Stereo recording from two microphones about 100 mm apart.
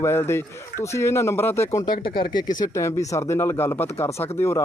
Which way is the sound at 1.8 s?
50° left (ahead or behind).